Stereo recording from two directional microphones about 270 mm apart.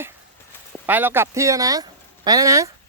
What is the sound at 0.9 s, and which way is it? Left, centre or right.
Speech, centre.